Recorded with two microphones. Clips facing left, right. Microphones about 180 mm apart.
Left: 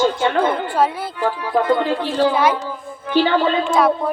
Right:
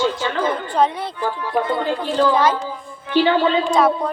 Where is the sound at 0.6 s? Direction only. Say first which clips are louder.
Even; 5° left (ahead or behind).